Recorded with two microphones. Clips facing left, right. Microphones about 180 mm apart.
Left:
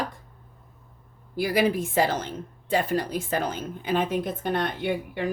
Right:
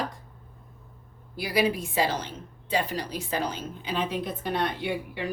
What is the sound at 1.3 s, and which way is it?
A woman's voice, 50° left (ahead or behind).